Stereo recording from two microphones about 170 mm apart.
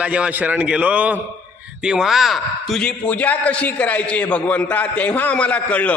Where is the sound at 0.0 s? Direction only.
5° right (ahead or behind).